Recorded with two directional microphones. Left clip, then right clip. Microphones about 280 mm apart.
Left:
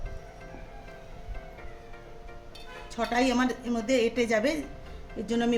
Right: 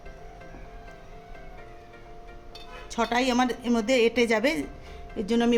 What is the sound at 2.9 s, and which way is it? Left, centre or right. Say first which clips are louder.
A woman's voice: right 2 dB; right.